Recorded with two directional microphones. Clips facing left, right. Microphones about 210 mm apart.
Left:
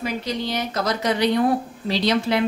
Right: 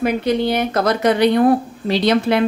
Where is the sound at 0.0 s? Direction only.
55° right (ahead or behind).